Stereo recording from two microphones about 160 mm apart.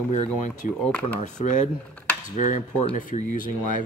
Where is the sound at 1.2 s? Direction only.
50° left (ahead or behind).